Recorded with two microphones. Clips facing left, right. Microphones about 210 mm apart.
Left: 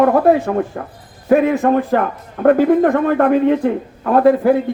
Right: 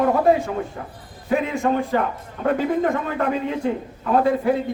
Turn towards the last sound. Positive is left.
turn(degrees=60)  # may be behind; listen again after turning